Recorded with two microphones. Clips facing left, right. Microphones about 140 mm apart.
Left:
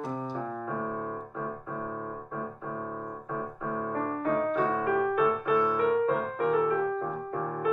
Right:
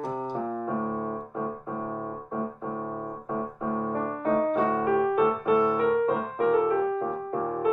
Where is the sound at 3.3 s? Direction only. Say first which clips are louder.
Right 4 dB; 20° right (ahead or behind).